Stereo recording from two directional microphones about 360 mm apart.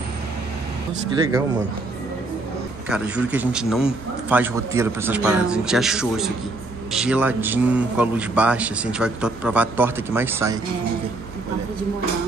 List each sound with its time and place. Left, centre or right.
2.9 s a man's voice: centre